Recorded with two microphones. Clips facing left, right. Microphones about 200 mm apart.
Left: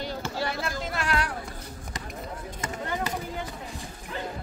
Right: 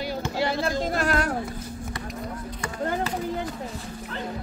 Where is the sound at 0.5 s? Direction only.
35° right (ahead or behind).